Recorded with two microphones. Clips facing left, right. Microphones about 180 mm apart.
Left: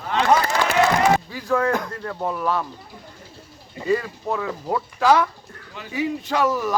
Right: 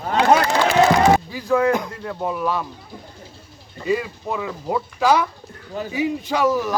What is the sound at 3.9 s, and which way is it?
Speech, 10° right (ahead or behind).